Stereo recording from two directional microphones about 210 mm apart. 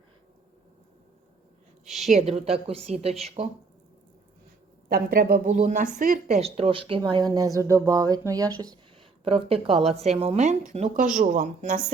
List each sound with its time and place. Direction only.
1.8 s a woman's voice: centre (ahead or behind)
2.0 s speech: 30° right (ahead or behind)
4.9 s speech: 45° right (ahead or behind)